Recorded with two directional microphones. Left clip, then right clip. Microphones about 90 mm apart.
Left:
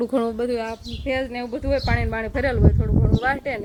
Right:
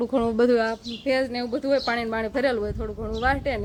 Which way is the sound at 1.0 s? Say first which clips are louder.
Right 1 dB; 15° right (ahead or behind).